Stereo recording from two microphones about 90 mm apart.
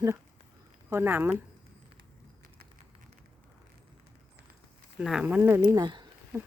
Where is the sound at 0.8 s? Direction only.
25° right (ahead or behind).